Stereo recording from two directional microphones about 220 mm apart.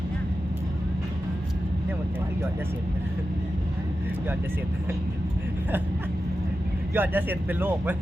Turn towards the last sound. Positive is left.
turn(degrees=-10)  # may be behind; listen again after turning